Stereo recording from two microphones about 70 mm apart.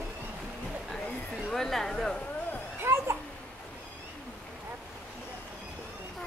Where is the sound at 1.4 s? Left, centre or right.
Centre.